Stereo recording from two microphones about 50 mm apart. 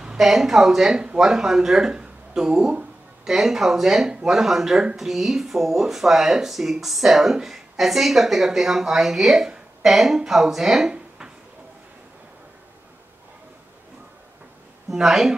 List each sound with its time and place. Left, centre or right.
0.2 s speech: centre
10.9 s a sound: centre
14.9 s speech: centre